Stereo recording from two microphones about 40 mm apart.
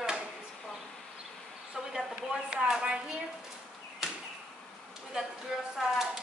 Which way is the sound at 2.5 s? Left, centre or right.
Centre.